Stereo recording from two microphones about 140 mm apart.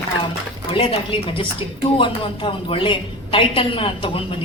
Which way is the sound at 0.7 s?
40° left (ahead or behind).